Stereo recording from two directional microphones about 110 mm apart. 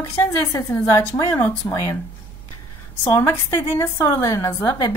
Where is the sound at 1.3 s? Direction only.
20° left (ahead or behind).